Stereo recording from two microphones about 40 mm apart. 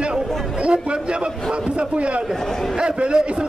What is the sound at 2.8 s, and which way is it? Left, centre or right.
Speech, right.